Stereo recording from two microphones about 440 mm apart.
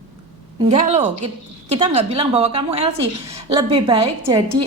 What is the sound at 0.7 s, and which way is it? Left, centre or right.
A woman's voice, centre.